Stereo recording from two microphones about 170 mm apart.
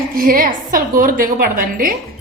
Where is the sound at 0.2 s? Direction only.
55° right (ahead or behind).